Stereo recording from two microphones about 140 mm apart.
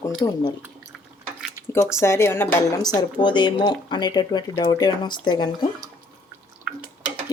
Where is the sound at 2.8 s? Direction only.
30° left (ahead or behind).